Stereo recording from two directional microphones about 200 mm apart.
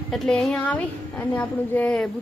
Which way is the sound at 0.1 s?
Centre (ahead or behind).